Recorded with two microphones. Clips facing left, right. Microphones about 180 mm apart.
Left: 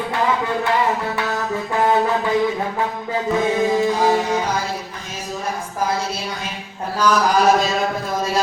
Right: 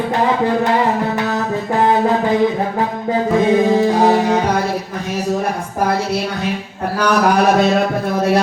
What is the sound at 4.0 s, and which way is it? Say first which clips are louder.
Speech: right 5 dB; 60° right (ahead or behind).